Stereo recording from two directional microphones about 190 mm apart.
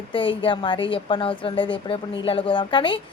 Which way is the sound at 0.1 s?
25° left (ahead or behind).